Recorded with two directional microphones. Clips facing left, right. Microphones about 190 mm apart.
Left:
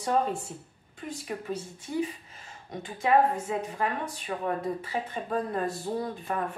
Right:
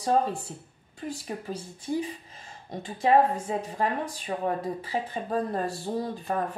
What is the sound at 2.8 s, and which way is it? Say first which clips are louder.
A woman's voice: right 2 dB; 30° right (ahead or behind).